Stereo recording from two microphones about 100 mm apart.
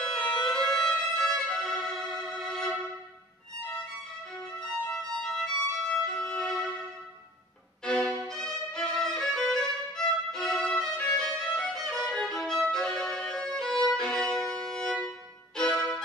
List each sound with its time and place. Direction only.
0.0 s violin: 10° left (ahead or behind)
4.6 s violin: 5° left (ahead or behind)
7.8 s violin: 10° left (ahead or behind)
15.5 s music: 10° left (ahead or behind)